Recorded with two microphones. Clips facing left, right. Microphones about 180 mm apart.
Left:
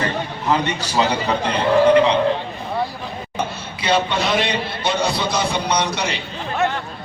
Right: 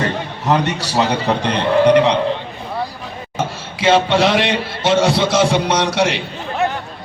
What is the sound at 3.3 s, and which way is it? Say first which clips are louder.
Speech: right 4 dB; 90° right.